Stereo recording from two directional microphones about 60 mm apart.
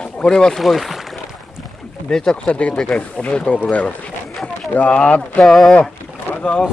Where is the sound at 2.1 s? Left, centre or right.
Centre.